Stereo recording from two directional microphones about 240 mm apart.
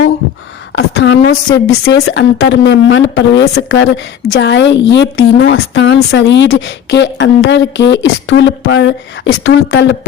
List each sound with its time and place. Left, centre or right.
0.9 s a woman's voice: left
1.8 s a woman's voice: left